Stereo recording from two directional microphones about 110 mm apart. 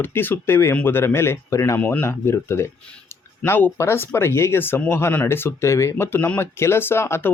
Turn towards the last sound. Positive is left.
turn(degrees=25)  # may be behind; listen again after turning